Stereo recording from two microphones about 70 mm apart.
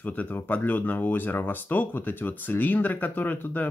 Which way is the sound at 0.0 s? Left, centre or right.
Left.